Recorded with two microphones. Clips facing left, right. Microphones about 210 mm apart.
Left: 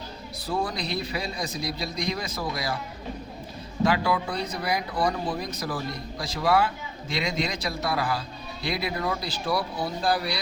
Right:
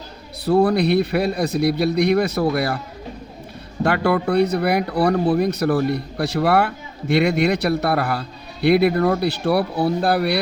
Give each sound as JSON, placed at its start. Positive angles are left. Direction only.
{"t": 0.4, "sound": "speech", "side_deg": -65}
{"t": 3.8, "sound": "speech", "side_deg": -60}